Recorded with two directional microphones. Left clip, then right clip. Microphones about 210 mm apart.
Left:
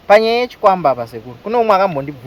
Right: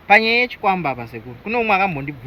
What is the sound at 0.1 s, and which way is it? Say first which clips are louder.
Speech: left 3 dB; 30° left (ahead or behind).